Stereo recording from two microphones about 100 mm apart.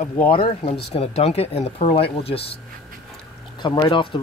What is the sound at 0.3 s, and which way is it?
Speech, 75° left (ahead or behind).